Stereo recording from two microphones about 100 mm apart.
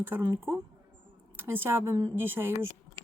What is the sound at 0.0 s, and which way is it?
Speech, 20° right (ahead or behind).